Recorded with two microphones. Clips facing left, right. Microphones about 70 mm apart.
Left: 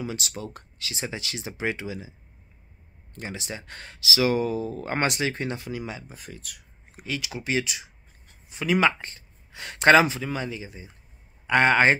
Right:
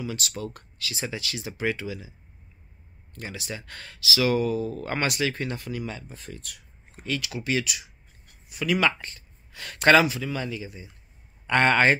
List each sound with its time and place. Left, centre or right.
0.0 s speech: left
3.2 s speech: left; by 7.1 s centre
7.1 s speech: left
11.4 s a man's voice: centre